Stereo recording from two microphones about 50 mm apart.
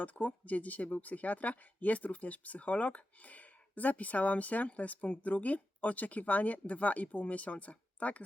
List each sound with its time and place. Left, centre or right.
0.0 s speech: left